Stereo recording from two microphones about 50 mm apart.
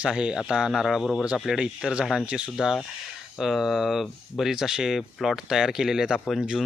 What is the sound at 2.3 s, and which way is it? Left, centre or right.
Speech, centre.